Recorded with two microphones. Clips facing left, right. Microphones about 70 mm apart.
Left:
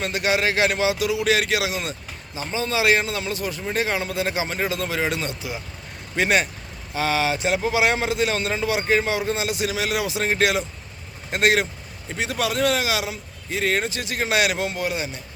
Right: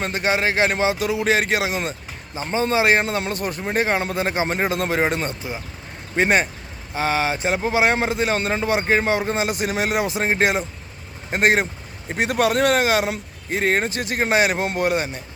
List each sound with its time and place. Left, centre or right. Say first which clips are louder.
0.0 s speech: right 1 dB; right